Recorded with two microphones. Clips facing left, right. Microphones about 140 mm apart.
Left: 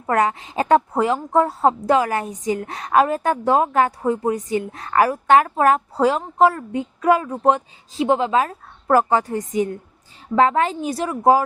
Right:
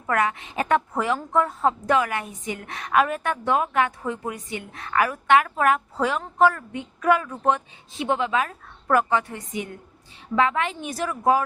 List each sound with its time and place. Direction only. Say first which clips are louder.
0.0 s a woman's voice: left 4 dB; 30° left (ahead or behind)